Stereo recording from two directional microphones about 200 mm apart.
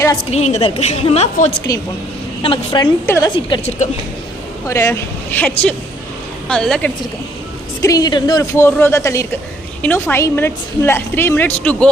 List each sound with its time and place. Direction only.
0.3 s a woman's voice: 35° left (ahead or behind)
4.7 s a woman's voice: 15° left (ahead or behind)
7.8 s a woman's voice: 15° left (ahead or behind)